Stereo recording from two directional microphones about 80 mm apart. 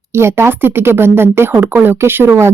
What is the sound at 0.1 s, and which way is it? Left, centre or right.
Speech, right.